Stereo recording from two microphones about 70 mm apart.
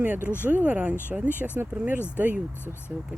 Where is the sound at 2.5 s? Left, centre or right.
Left.